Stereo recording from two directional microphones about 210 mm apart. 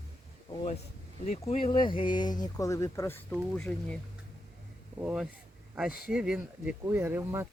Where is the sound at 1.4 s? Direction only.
25° left (ahead or behind).